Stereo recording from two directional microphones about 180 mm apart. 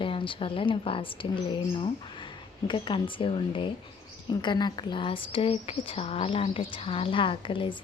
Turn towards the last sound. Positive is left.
turn(degrees=30)  # may be behind; listen again after turning